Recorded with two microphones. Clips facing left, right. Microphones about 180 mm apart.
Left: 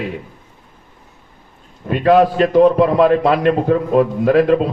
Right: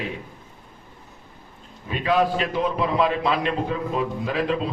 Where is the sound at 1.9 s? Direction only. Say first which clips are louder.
Left 9 dB; 55° left (ahead or behind).